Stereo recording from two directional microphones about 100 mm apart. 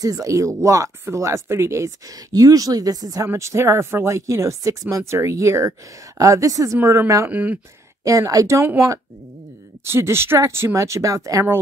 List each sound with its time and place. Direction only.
0.0 s speech: 35° right (ahead or behind); by 7.5 s 15° right (ahead or behind)
8.0 s speech: 35° right (ahead or behind)